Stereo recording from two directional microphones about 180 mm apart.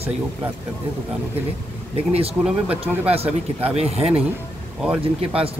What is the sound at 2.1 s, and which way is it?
Speech, 35° right (ahead or behind).